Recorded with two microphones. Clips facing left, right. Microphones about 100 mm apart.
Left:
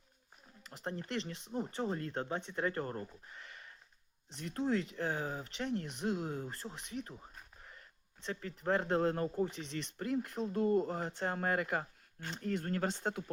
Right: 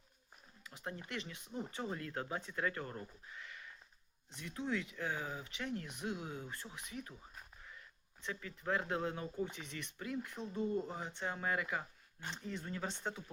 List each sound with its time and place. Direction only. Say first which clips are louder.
0.7 s speech: left 5 dB; 35° left (ahead or behind)
2.7 s speech: left 6 dB; 40° left (ahead or behind)
3.4 s a sound: even; 35° left (ahead or behind)
4.4 s speech: left 6 dB; 35° left (ahead or behind)
10.4 s speech: left 7 dB; 65° left (ahead or behind)
10.9 s speech: left 5 dB; 40° left (ahead or behind)
12.4 s speech: left 8 dB; 65° left (ahead or behind)